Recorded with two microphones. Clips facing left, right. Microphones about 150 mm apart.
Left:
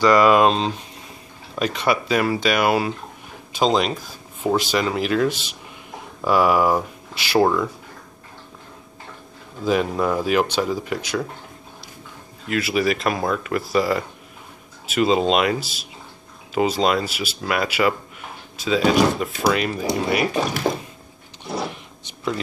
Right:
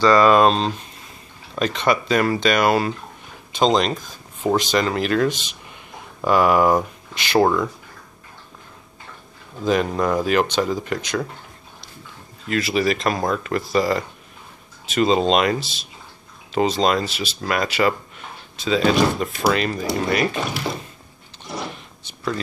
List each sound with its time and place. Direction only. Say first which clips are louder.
0.0 s speech: right 1 dB; 10° left (ahead or behind)
9.7 s speech: right 1 dB; 5° left (ahead or behind)
12.4 s speech: even; 5° left (ahead or behind)
22.0 s a sound: even; 15° left (ahead or behind)